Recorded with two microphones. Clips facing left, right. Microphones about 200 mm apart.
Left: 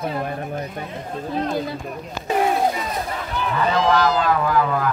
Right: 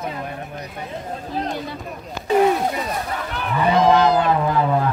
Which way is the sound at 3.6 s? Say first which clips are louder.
Right 4 dB; 20° right (ahead or behind).